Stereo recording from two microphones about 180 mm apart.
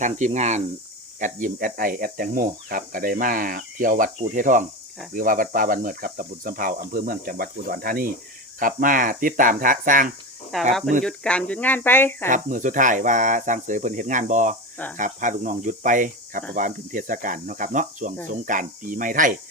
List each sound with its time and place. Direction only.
0.0 s speech: 40° right (ahead or behind)
1.2 s speech: 50° right (ahead or behind)
10.5 s speech: centre (ahead or behind)
12.3 s speech: 45° right (ahead or behind)